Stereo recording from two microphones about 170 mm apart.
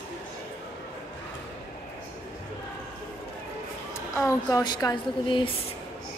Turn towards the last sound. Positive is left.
turn(degrees=30)  # may be behind; listen again after turning